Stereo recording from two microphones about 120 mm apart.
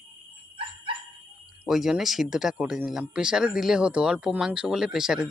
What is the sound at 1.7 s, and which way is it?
Speech, 5° right (ahead or behind).